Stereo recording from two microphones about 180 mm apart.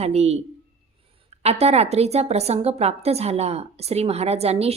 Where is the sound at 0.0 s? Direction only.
35° right (ahead or behind).